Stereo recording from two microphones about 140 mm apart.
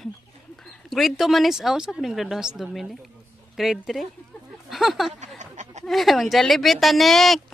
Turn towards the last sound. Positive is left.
turn(degrees=0)  # may be behind; listen again after turning